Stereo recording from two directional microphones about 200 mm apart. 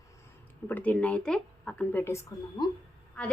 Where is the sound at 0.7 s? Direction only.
5° left (ahead or behind).